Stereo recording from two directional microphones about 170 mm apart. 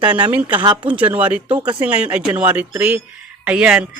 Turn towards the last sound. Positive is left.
turn(degrees=-5)  # may be behind; listen again after turning